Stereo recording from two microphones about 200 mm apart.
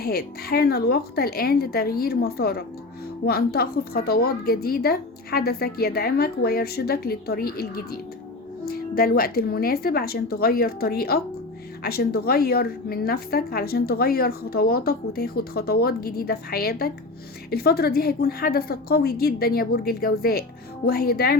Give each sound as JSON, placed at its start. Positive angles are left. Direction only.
{"t": 0.0, "sound": "a woman's voice", "side_deg": 50}